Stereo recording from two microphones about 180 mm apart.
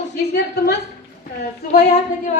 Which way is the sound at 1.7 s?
55° left (ahead or behind).